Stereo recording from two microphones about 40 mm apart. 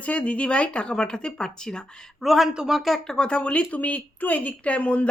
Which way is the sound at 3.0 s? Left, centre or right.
Centre.